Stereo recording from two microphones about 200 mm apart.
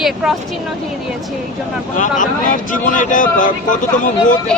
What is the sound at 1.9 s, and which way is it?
Speech, 40° left (ahead or behind).